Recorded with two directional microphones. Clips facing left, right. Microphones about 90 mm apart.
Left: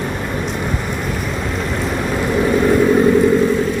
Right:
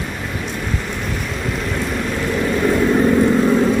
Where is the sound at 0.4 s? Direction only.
15° left (ahead or behind).